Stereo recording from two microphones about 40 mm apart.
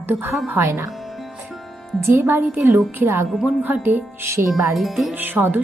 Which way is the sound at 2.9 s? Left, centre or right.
Right.